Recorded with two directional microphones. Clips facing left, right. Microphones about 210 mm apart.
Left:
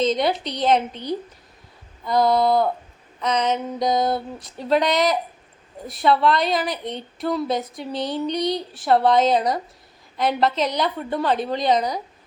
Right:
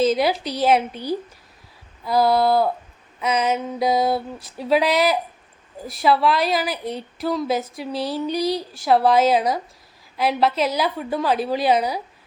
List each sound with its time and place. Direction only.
0.0 s a woman's voice: 5° right (ahead or behind)